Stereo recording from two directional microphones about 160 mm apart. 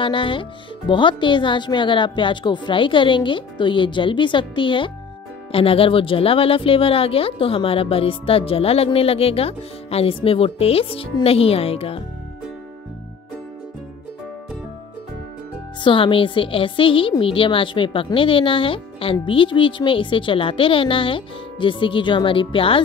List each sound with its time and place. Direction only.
0.0 s speech: 30° left (ahead or behind)
15.8 s speech: 30° left (ahead or behind)